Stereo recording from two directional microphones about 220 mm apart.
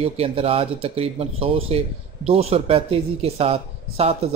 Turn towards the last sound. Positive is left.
turn(degrees=-30)  # may be behind; listen again after turning